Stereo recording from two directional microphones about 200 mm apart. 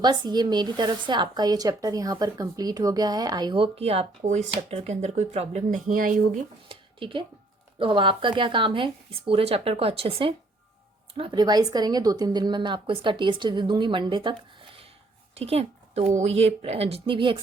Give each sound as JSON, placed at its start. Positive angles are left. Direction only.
{"t": 0.0, "sound": "a woman's voice", "side_deg": -20}
{"t": 6.7, "sound": "a woman's voice", "side_deg": -25}